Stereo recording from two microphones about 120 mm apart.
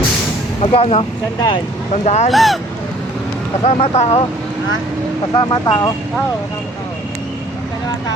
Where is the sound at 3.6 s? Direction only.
60° left (ahead or behind).